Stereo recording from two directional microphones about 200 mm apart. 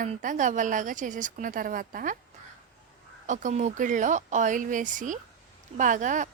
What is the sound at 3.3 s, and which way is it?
A woman's voice, 40° right (ahead or behind).